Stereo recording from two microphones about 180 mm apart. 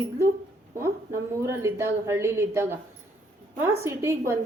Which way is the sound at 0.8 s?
15° right (ahead or behind).